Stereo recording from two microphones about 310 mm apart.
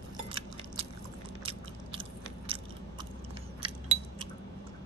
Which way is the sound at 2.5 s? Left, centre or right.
Centre.